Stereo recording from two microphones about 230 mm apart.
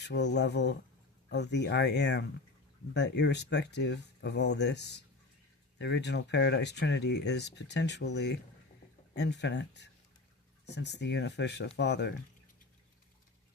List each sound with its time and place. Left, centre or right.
0.0 s speech: left